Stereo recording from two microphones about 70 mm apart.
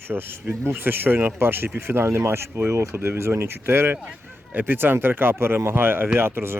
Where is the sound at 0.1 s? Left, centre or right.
Right.